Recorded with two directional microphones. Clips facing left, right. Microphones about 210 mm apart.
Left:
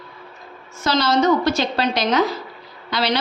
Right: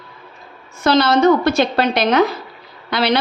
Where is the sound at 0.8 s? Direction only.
60° right (ahead or behind).